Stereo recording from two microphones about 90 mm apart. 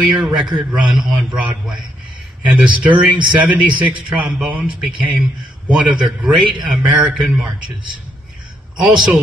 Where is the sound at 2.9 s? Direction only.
60° right (ahead or behind).